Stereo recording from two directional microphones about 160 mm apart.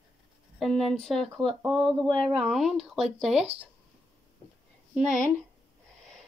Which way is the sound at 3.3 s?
40° right (ahead or behind).